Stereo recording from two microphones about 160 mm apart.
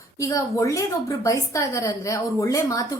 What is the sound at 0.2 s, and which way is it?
A woman's voice, 20° left (ahead or behind).